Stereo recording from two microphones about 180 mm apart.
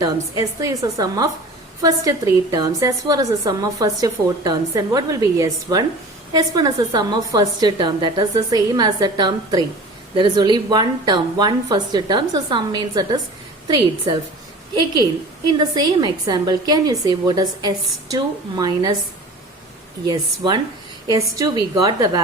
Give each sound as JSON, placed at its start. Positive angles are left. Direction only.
{"t": 0.0, "sound": "a woman's voice", "side_deg": -20}
{"t": 15.5, "sound": "a woman's voice", "side_deg": -25}
{"t": 20.1, "sound": "a woman's voice", "side_deg": -20}